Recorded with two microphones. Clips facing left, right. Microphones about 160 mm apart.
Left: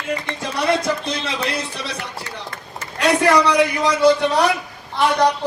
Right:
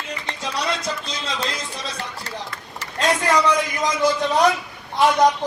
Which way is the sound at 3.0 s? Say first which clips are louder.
Left 4 dB; 70° left (ahead or behind).